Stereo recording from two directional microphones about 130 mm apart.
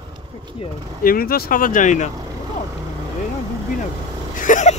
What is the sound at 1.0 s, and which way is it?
Speech, 90° left.